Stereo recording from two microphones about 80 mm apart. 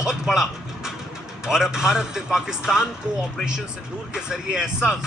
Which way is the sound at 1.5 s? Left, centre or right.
Centre.